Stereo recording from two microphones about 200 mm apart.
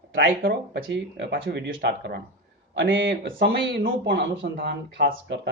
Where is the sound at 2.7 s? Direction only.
70° right (ahead or behind).